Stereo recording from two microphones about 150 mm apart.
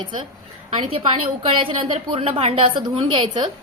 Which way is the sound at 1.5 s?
35° right (ahead or behind).